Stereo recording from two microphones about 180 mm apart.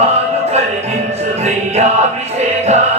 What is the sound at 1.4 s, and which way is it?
Music, 35° right (ahead or behind).